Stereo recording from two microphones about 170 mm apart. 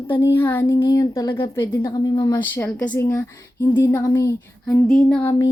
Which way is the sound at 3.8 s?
15° left (ahead or behind).